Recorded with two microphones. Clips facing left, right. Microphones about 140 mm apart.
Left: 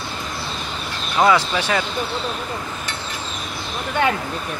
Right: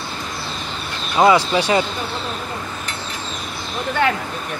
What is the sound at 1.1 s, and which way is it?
Speech, 10° right (ahead or behind).